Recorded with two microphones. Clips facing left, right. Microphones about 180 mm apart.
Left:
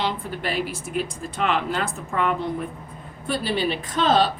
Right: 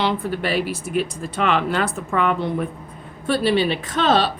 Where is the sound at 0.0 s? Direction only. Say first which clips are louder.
Right 5 dB; 75° right (ahead or behind).